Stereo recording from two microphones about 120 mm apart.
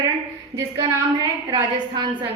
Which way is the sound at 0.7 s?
30° right (ahead or behind).